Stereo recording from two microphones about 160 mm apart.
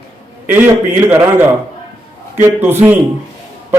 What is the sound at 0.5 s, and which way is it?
Speech, 10° right (ahead or behind).